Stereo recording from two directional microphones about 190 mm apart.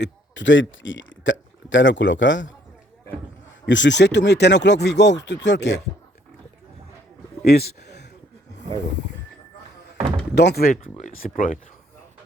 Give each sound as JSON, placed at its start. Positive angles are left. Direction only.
{"t": 0.0, "sound": "speech", "side_deg": 75}
{"t": 3.7, "sound": "speech", "side_deg": 75}
{"t": 7.4, "sound": "speech", "side_deg": 55}
{"t": 10.3, "sound": "speech", "side_deg": 60}